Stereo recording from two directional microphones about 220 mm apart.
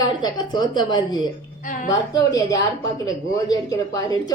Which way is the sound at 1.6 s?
40° left (ahead or behind).